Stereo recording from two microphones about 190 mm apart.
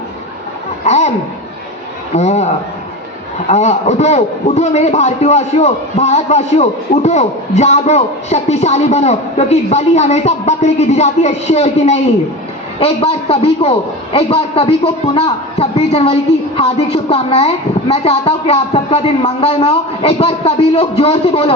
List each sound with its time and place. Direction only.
0.9 s speech: 35° left (ahead or behind)
2.1 s a man's voice: 35° left (ahead or behind)
3.5 s a man's voice: 35° left (ahead or behind)